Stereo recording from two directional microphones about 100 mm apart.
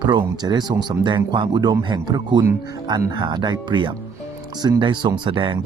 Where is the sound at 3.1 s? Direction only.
50° right (ahead or behind).